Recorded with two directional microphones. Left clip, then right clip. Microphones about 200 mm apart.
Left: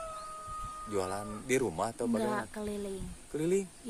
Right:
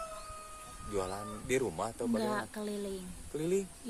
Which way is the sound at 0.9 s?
45° left (ahead or behind).